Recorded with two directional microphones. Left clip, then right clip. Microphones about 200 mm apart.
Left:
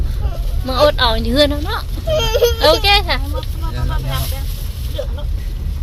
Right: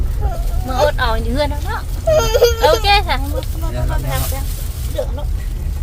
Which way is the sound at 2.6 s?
20° left (ahead or behind).